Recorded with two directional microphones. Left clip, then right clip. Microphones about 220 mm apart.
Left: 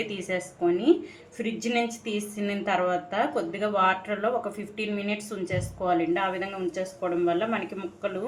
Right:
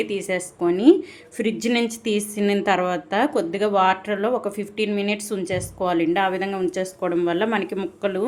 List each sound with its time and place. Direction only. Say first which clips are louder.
0.0 s a woman's voice: right 6 dB; 35° right (ahead or behind); by 8.1 s 50° right (ahead or behind)